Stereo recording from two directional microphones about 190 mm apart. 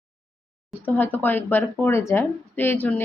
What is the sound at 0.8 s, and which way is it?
A woman's voice, 10° left (ahead or behind).